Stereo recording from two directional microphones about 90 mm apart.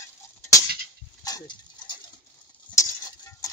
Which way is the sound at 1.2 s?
50° left (ahead or behind).